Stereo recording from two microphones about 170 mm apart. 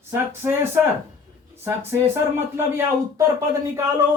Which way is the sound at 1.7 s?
15° right (ahead or behind).